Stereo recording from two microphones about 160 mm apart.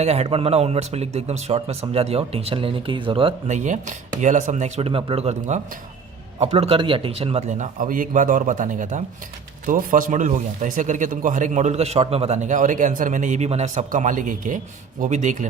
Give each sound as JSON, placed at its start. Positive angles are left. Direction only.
{"t": 0.0, "sound": "a man's voice", "side_deg": -45}
{"t": 3.5, "sound": "a man's voice", "side_deg": -50}